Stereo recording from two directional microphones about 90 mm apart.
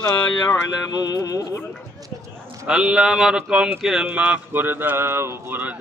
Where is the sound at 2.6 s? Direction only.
5° right (ahead or behind).